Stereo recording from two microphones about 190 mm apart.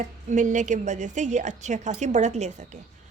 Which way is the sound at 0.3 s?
40° right (ahead or behind).